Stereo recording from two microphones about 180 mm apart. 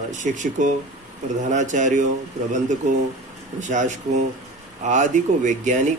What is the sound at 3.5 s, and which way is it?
Speech, 45° right (ahead or behind).